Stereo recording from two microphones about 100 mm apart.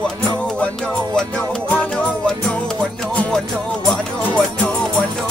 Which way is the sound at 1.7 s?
15° left (ahead or behind).